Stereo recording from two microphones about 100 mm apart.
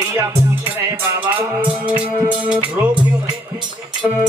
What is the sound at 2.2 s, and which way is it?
Music, 10° right (ahead or behind).